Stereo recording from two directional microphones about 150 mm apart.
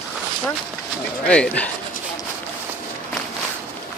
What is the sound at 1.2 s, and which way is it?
Speech, 5° left (ahead or behind).